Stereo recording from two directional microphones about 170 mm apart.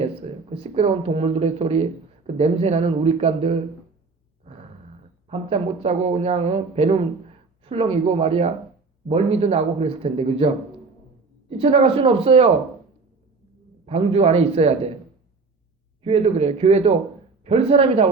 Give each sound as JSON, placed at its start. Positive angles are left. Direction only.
{"t": 0.0, "sound": "speech", "side_deg": -35}
{"t": 5.3, "sound": "speech", "side_deg": -35}
{"t": 13.8, "sound": "speech", "side_deg": -35}
{"t": 16.0, "sound": "speech", "side_deg": -35}